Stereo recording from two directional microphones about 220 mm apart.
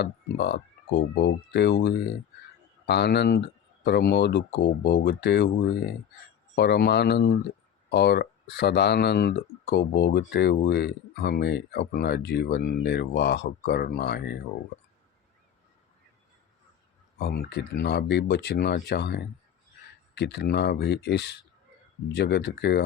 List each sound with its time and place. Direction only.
0.0 s speech: 50° left (ahead or behind)
17.2 s speech: 45° left (ahead or behind)